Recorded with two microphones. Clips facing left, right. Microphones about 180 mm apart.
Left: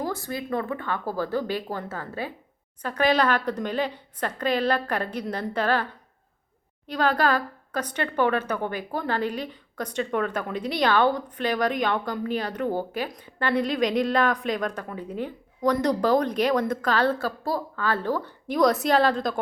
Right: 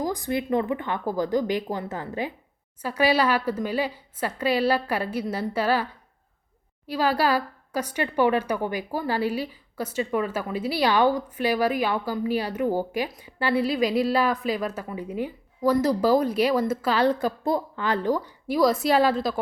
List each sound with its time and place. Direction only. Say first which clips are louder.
0.0 s a woman's voice: right 3 dB; 15° right (ahead or behind)